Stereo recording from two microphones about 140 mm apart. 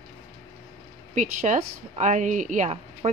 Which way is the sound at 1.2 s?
60° right (ahead or behind).